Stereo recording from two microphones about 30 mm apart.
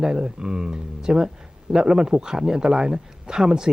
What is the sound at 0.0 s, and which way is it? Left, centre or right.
Speech, right.